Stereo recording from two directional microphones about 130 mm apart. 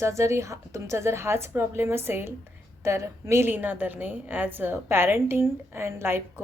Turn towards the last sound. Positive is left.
turn(degrees=-15)  # may be behind; listen again after turning